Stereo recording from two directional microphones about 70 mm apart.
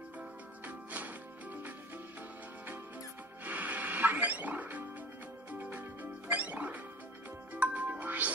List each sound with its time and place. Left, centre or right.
0.7 s music: right
3.4 s music: right